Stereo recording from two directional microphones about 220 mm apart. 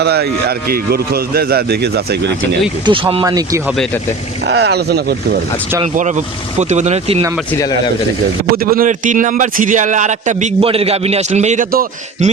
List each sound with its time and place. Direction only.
0.0 s a man's voice: 45° right (ahead or behind)
2.8 s speech: 25° right (ahead or behind)
3.7 s speech: centre (ahead or behind)
4.4 s a man's voice: 50° right (ahead or behind)
5.8 s a man's voice: 35° right (ahead or behind)
8.5 s a man's voice: 40° right (ahead or behind)